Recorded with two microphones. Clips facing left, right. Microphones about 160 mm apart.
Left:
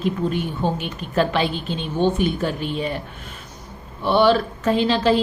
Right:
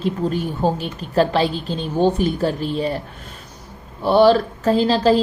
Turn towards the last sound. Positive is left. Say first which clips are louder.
# right 2 dB
turn(degrees=-35)  # may be behind; listen again after turning